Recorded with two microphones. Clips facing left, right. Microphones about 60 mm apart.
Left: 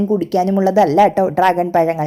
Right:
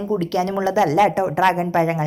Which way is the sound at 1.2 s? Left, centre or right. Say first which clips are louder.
Left 4 dB; centre.